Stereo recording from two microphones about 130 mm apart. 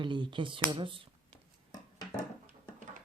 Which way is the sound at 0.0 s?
35° right (ahead or behind).